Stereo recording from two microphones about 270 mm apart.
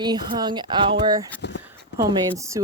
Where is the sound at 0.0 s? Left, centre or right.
Centre.